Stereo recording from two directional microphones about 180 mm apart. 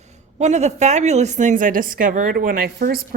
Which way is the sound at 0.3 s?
40° right (ahead or behind).